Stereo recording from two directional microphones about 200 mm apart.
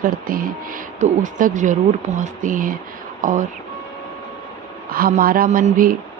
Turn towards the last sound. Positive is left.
turn(degrees=-45)  # may be behind; listen again after turning